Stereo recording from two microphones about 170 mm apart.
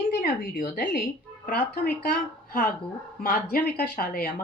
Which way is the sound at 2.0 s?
60° left (ahead or behind).